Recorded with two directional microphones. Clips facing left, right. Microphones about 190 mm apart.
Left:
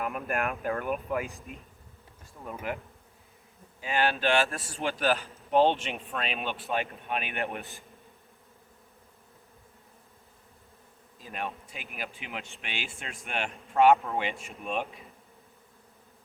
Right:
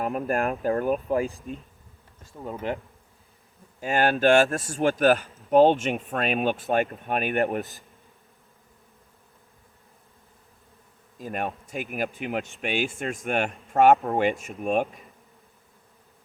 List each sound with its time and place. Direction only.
0.0 s speech: 35° right (ahead or behind)
2.7 s bee: 30° right (ahead or behind)
3.8 s speech: 45° right (ahead or behind)
11.2 s speech: 50° right (ahead or behind)